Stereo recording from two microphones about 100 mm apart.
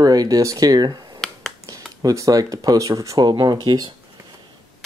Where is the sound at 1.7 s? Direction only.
35° right (ahead or behind).